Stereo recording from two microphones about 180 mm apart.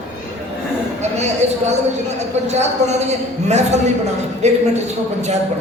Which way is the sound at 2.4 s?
40° right (ahead or behind).